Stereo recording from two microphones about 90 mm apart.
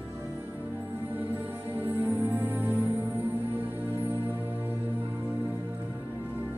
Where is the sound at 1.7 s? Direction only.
20° right (ahead or behind).